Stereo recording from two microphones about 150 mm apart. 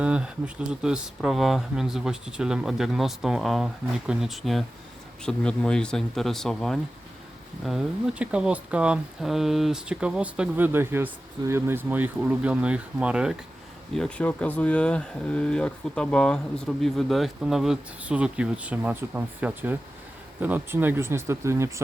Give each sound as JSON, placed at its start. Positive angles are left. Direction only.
{"t": 0.0, "sound": "speech", "side_deg": -5}
{"t": 13.9, "sound": "speech", "side_deg": 5}